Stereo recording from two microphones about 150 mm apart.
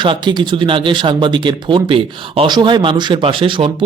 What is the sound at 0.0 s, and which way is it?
Speech, 30° right (ahead or behind).